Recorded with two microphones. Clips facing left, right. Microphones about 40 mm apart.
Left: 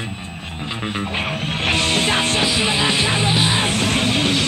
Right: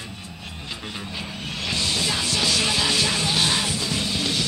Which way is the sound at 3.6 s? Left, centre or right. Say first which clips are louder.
Left 7 dB; left.